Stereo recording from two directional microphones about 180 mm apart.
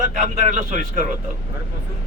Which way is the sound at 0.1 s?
45° right (ahead or behind).